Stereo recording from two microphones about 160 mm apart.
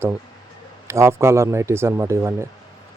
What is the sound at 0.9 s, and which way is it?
Speech, 15° right (ahead or behind).